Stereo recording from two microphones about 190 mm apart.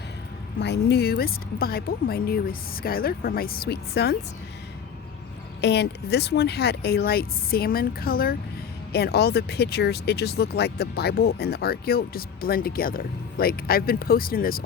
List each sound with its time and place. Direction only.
0.6 s speech: 60° left (ahead or behind)
5.5 s speech: 60° left (ahead or behind)